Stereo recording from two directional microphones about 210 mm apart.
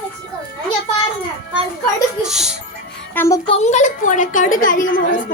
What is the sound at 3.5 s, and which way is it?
A woman's voice, 35° left (ahead or behind).